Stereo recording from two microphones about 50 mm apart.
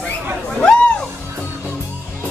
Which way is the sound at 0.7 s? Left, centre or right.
Centre.